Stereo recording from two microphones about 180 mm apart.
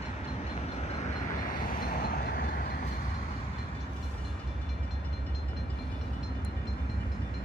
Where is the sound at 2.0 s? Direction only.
55° left (ahead or behind).